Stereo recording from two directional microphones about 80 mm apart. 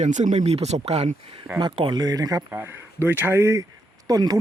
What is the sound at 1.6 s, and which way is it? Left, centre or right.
Speech, right.